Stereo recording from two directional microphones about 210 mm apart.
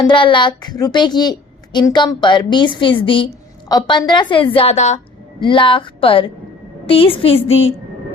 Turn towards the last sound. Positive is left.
turn(degrees=30)  # may be behind; listen again after turning